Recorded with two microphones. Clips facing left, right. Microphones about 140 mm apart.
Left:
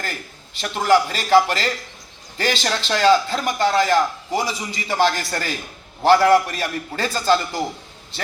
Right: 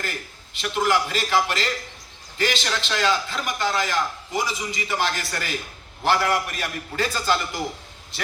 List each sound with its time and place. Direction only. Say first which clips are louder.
0.0 s a man's voice: left 1 dB; 35° left (ahead or behind)